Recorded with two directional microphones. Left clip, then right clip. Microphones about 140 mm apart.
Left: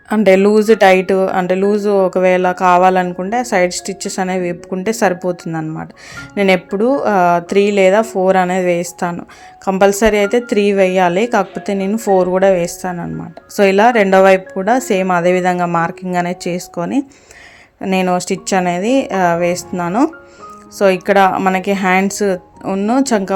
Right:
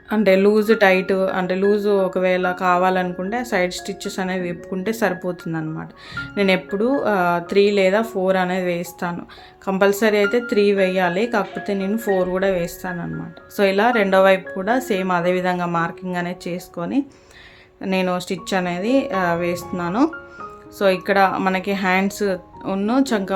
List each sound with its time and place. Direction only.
0.1 s speech: 40° left (ahead or behind)
21.6 s speech: 45° left (ahead or behind)